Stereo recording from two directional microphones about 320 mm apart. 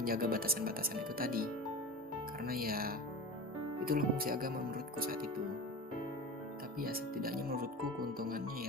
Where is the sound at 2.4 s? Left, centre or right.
Right.